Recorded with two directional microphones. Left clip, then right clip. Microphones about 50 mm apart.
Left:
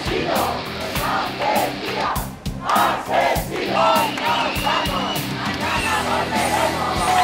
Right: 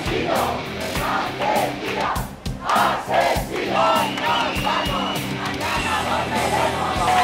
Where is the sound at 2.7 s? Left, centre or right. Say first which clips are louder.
Left 1 dB; centre.